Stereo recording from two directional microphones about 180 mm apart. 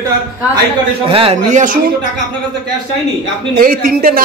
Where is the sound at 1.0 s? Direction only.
30° right (ahead or behind).